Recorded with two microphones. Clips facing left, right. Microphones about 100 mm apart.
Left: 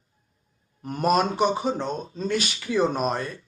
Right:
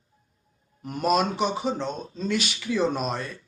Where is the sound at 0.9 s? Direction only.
40° left (ahead or behind).